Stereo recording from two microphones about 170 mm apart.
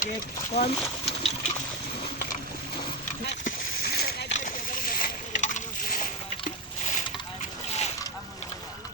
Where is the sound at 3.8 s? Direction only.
70° left (ahead or behind).